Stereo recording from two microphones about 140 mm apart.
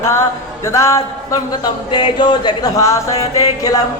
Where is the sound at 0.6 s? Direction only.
20° left (ahead or behind).